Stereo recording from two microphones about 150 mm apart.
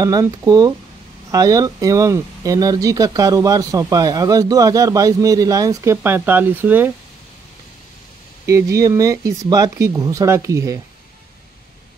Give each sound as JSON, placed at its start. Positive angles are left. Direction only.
{"t": 0.0, "sound": "speech", "side_deg": -25}
{"t": 8.5, "sound": "speech", "side_deg": -20}